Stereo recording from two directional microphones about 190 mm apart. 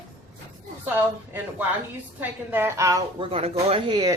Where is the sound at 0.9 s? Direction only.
10° right (ahead or behind).